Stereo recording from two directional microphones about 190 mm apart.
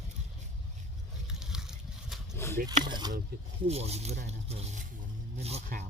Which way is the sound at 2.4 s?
15° left (ahead or behind).